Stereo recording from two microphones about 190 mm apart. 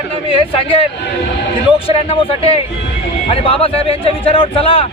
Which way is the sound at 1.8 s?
30° left (ahead or behind).